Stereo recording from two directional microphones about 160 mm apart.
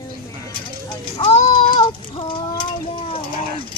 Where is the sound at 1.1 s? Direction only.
40° left (ahead or behind).